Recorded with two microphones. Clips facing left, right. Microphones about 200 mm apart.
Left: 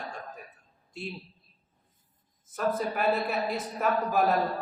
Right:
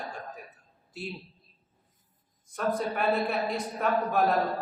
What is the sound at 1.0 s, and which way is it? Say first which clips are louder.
Speech: even; centre (ahead or behind).